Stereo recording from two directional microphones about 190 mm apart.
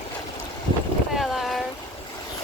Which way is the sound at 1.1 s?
Centre (ahead or behind).